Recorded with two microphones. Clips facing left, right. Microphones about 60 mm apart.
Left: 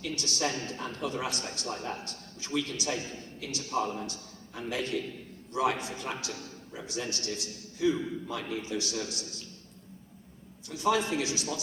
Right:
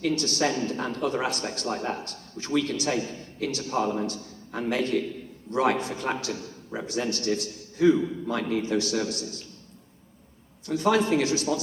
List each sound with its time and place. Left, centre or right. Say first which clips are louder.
0.0 s a man's voice: right 7 dB; right
1.6 s a man's voice: right 7 dB; right
10.7 s a man's voice: right 5 dB; right